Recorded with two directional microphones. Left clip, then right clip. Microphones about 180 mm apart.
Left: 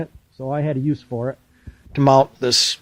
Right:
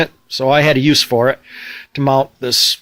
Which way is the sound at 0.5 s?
10° right (ahead or behind).